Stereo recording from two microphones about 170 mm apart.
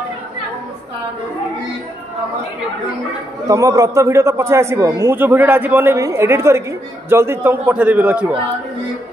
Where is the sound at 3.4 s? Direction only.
20° right (ahead or behind).